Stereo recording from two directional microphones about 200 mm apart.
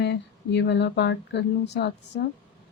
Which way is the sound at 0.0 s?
60° left (ahead or behind).